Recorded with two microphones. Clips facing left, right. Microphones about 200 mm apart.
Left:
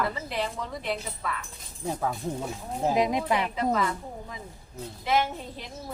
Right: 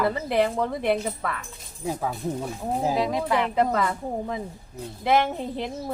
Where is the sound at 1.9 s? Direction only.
10° right (ahead or behind).